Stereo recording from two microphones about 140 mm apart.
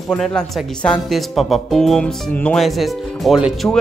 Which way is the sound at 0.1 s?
5° left (ahead or behind).